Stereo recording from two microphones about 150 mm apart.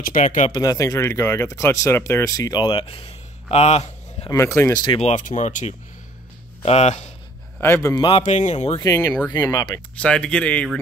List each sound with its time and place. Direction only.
0.0 s speech: 60° left (ahead or behind)
0.5 s speech: 25° left (ahead or behind); by 4.3 s 45° left (ahead or behind)
4.3 s speech: 20° left (ahead or behind)
4.8 s speech: 35° left (ahead or behind)
5.1 s speech: 55° left (ahead or behind)
7.6 s speech: 15° left (ahead or behind)
8.2 s speech: 50° left (ahead or behind)
8.8 s speech: 20° left (ahead or behind)
9.9 s speech: 5° left (ahead or behind)